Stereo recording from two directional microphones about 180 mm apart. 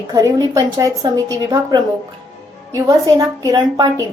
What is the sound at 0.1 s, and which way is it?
A woman's voice, 20° right (ahead or behind).